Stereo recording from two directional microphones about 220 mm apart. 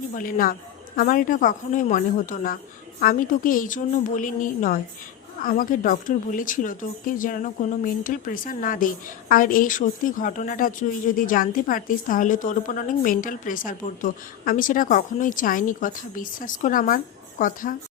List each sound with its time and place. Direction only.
0.1 s a woman's voice: 40° left (ahead or behind)